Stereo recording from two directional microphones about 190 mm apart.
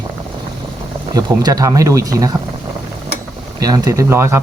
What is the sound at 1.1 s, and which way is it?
Speech, 20° right (ahead or behind).